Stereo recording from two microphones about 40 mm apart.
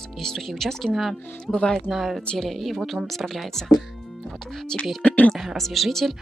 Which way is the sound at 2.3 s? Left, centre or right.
Centre.